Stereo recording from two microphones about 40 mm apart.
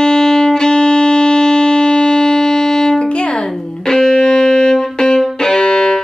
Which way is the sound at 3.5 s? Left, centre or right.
Centre.